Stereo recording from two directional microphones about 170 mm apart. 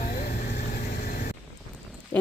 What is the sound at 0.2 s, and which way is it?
Vehicle, 40° left (ahead or behind).